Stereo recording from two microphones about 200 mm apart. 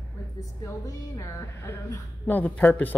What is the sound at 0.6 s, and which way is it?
A woman's voice, 15° left (ahead or behind).